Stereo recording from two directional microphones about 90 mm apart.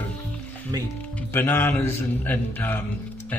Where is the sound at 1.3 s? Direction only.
20° left (ahead or behind).